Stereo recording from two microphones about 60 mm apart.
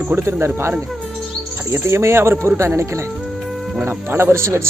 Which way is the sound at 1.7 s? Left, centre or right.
Right.